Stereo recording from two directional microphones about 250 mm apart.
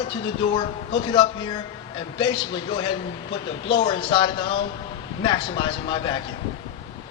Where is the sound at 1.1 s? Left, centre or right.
Centre.